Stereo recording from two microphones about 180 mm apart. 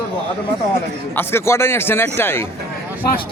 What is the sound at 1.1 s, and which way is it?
A man's voice, 15° left (ahead or behind).